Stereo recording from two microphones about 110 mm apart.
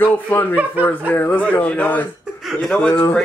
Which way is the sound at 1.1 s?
15° left (ahead or behind).